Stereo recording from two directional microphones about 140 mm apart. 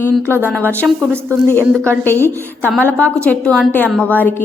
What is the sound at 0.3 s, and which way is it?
Speech, 15° left (ahead or behind).